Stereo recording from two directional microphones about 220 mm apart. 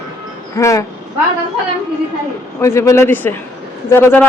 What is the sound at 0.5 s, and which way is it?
Speech, 15° left (ahead or behind).